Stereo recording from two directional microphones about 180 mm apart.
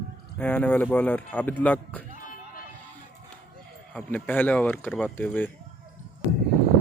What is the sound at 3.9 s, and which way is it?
Speech, 10° left (ahead or behind).